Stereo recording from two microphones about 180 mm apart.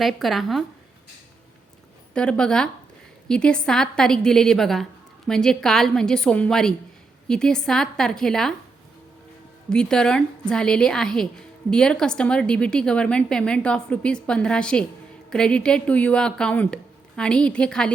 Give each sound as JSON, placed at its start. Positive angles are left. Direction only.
{"t": 0.0, "sound": "a woman's voice", "side_deg": 0}
{"t": 2.1, "sound": "a woman's voice", "side_deg": 5}
{"t": 9.6, "sound": "a woman's voice", "side_deg": 5}